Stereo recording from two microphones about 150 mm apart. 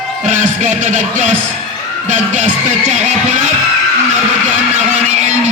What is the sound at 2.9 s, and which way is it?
Speech, 50° right (ahead or behind).